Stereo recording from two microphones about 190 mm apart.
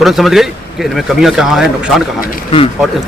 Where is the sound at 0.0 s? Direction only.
Centre (ahead or behind).